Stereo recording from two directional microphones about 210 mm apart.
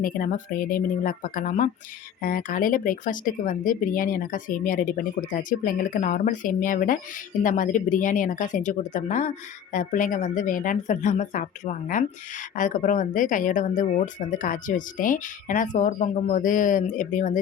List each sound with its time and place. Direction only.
0.0 s speech: 40° left (ahead or behind)